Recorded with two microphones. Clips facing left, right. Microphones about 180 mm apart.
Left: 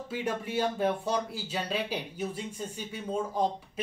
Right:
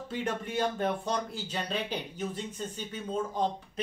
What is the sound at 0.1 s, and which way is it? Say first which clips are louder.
Speech: left 1 dB; 10° left (ahead or behind).